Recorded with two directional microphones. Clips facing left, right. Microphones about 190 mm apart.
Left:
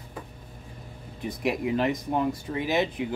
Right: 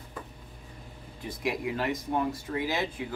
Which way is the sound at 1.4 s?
20° left (ahead or behind).